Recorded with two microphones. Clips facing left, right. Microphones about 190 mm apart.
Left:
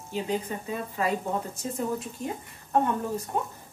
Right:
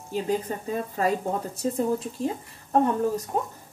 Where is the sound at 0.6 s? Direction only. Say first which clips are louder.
Right 4 dB; 40° right (ahead or behind).